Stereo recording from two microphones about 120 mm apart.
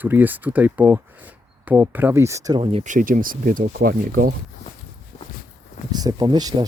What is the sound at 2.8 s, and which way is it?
Speech, 90° right.